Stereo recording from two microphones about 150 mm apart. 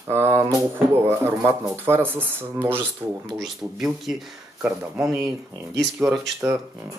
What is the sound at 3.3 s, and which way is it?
Speech, centre (ahead or behind).